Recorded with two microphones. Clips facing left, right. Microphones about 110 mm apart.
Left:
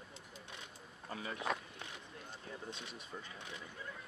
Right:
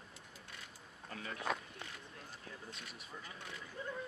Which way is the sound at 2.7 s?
25° left (ahead or behind).